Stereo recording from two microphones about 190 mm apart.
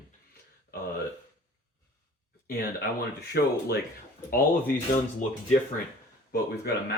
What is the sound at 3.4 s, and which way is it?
Speech, 55° left (ahead or behind).